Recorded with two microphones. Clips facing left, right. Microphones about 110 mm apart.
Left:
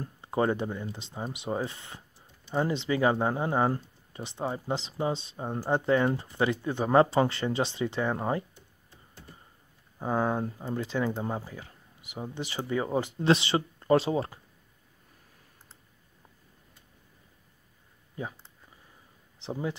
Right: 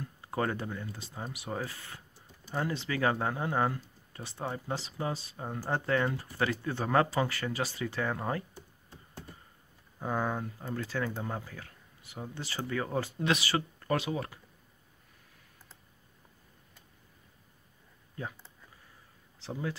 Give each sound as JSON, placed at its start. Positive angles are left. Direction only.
{"t": 0.2, "sound": "speech", "side_deg": 20}
{"t": 8.5, "sound": "computer keyboard", "side_deg": -40}
{"t": 9.9, "sound": "speech", "side_deg": 15}
{"t": 19.4, "sound": "a sound", "side_deg": 20}